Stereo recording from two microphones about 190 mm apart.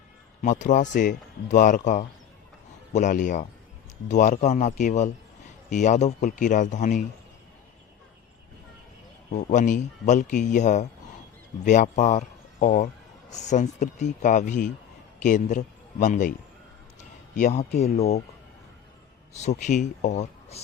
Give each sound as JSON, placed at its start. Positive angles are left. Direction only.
{"t": 0.4, "sound": "speech", "side_deg": 40}
{"t": 9.3, "sound": "a man's voice", "side_deg": 40}
{"t": 19.3, "sound": "speech", "side_deg": 35}